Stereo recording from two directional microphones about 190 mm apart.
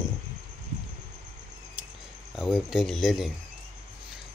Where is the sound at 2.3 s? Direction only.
Centre (ahead or behind).